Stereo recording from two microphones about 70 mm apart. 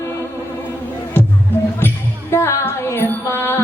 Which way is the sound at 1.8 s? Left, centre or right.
Left.